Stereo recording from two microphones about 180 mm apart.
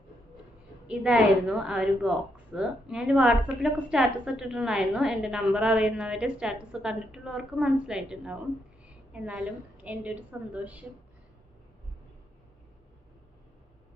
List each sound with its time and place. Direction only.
0.9 s a woman's voice: 5° right (ahead or behind)